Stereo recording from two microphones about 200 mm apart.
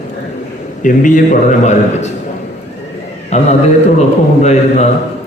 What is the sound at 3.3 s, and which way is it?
A man's voice, 35° left (ahead or behind).